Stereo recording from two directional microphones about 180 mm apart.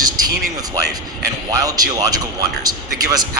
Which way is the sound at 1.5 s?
20° right (ahead or behind).